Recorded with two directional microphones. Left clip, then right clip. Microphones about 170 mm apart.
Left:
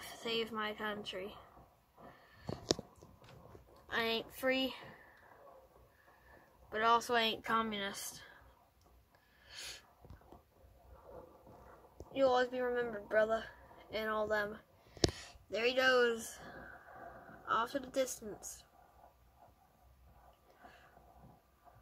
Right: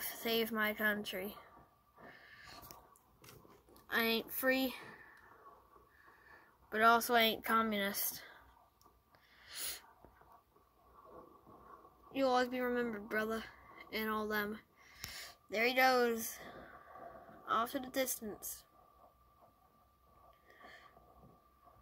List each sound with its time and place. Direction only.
0.0 s speech: 15° right (ahead or behind)
3.8 s speech: 10° right (ahead or behind)
6.7 s speech: 15° right (ahead or behind)
9.5 s a sound: 10° right (ahead or behind)
12.1 s speech: 20° right (ahead or behind)
15.0 s a sound: 10° right (ahead or behind)
17.5 s speech: 10° right (ahead or behind)